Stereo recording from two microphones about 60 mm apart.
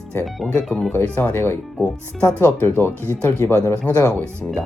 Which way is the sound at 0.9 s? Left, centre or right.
Left.